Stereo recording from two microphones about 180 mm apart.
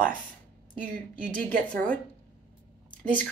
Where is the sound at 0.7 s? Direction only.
50° right (ahead or behind).